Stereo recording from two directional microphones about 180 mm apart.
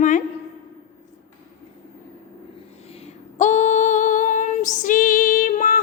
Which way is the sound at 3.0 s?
40° left (ahead or behind).